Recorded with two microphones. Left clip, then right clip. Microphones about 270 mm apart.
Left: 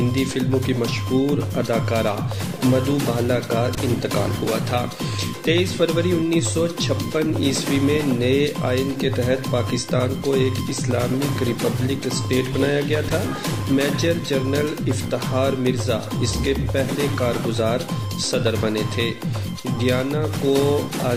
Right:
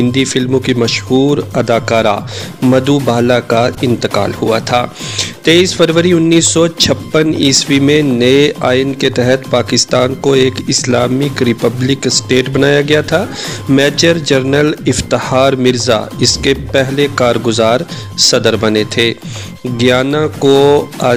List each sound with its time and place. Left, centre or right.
0.1 s speech: right